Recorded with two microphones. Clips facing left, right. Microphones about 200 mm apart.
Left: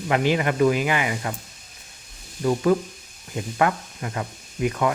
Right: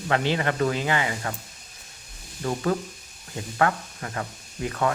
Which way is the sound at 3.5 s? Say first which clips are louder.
Left 1 dB; 20° left (ahead or behind).